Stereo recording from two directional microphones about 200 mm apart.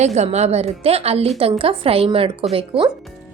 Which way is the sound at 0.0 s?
35° right (ahead or behind).